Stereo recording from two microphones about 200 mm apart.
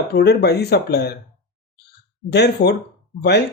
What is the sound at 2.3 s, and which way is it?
Speech, 55° left (ahead or behind).